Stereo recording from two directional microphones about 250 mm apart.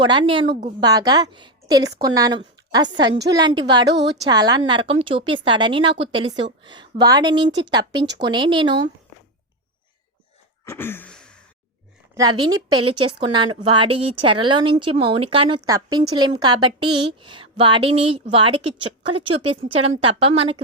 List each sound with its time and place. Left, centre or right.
0.0 s a woman's voice: centre
3.8 s a woman's voice: right
4.3 s a woman's voice: centre
10.7 s gasp: centre
12.1 s a woman's voice: centre